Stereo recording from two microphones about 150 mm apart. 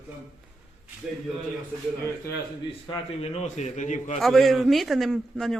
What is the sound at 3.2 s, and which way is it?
Speech, 45° left (ahead or behind).